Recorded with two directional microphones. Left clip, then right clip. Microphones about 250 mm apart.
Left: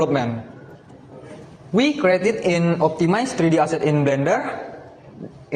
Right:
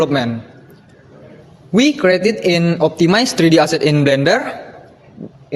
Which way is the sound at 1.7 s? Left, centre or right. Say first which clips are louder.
Right 4 dB; right.